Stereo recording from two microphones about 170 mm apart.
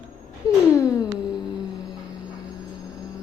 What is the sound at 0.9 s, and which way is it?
Music, 5° right (ahead or behind).